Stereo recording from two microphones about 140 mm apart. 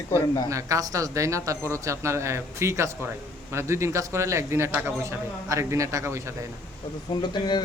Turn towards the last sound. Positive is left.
turn(degrees=30)  # may be behind; listen again after turning